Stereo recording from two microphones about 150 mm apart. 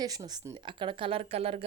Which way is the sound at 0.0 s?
25° right (ahead or behind).